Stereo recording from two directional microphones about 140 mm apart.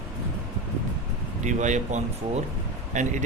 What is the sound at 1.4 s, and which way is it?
Speech, 60° right (ahead or behind).